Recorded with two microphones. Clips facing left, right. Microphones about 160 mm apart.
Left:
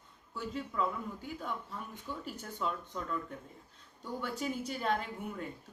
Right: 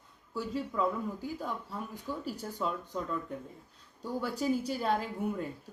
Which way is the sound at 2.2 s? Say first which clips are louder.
Right 2 dB; 35° right (ahead or behind).